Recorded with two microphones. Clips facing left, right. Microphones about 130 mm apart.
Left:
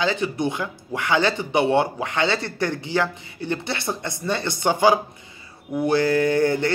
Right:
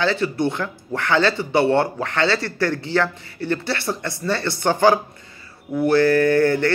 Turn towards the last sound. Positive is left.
turn(degrees=15)  # may be behind; listen again after turning